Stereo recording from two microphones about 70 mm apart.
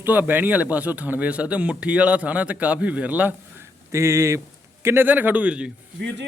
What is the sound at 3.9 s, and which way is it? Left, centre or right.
Speech, right.